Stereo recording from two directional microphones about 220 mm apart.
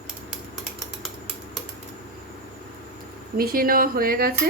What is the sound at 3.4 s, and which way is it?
Speech, 40° right (ahead or behind).